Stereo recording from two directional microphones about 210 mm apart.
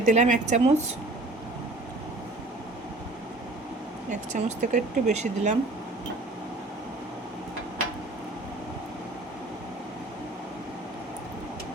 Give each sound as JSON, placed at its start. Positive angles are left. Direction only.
{"t": 0.0, "sound": "speech", "side_deg": -35}
{"t": 4.1, "sound": "speech", "side_deg": -35}